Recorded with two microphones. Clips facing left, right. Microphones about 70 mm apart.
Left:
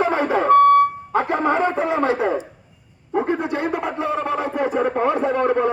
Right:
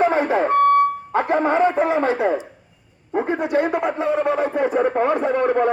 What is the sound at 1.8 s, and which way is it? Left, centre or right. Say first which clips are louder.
Speech: right 1 dB; right.